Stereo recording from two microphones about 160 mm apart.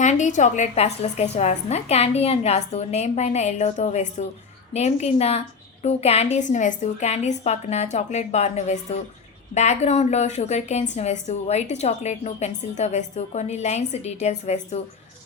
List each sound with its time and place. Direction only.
0.0 s a woman's voice: 50° left (ahead or behind)